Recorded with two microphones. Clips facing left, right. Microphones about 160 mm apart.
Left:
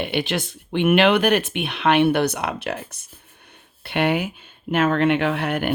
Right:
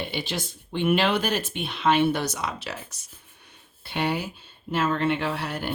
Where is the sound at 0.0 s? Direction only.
60° left (ahead or behind).